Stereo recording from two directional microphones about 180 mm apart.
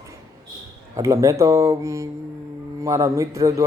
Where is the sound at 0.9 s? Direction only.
15° right (ahead or behind).